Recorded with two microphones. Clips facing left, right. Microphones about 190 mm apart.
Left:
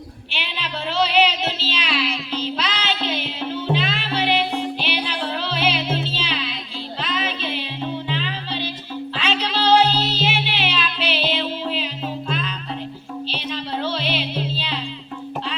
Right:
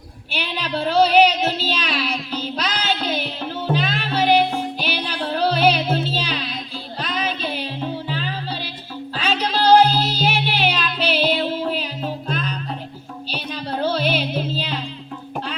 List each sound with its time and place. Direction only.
0.3 s music: 40° right (ahead or behind)